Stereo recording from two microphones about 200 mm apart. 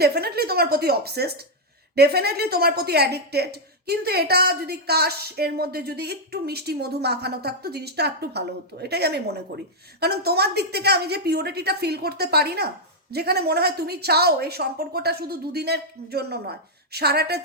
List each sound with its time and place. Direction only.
0.0 s a woman's voice: 50° right (ahead or behind)